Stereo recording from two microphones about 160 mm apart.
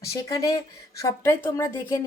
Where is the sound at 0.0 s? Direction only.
20° left (ahead or behind).